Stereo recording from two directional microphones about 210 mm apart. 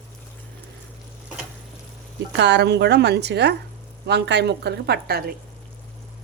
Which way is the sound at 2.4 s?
55° right (ahead or behind).